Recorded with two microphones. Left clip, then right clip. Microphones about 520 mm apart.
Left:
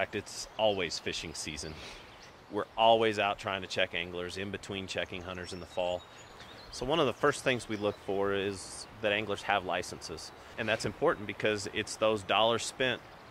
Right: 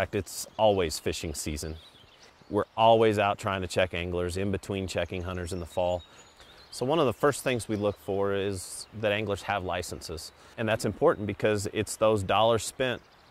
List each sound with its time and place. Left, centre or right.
0.0 s speech: right